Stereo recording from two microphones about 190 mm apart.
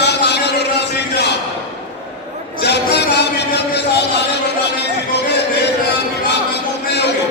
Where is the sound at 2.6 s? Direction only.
60° left (ahead or behind).